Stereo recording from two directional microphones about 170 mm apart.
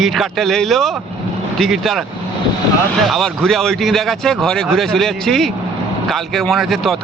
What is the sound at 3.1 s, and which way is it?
Speech, centre (ahead or behind).